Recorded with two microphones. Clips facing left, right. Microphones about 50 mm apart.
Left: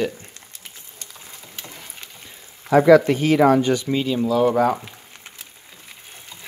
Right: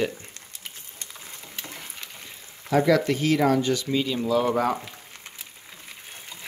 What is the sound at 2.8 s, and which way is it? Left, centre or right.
Speech, left.